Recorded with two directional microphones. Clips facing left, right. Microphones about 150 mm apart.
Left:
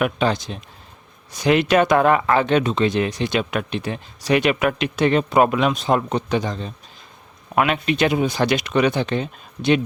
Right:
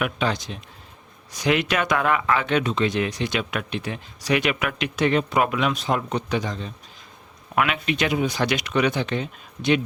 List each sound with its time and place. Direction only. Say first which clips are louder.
0.0 s speech: left 5 dB; 35° left (ahead or behind)